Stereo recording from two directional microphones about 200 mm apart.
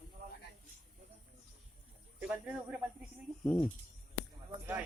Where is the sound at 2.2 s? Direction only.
5° right (ahead or behind).